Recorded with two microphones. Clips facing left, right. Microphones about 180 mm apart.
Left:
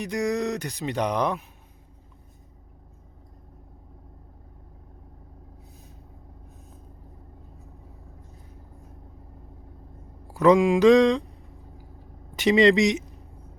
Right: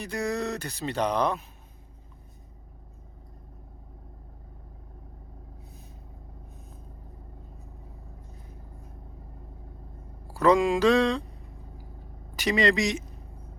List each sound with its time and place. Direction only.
0.0 s speech: 15° left (ahead or behind)
10.2 s mantra: 15° left (ahead or behind)
12.4 s speech: 20° left (ahead or behind)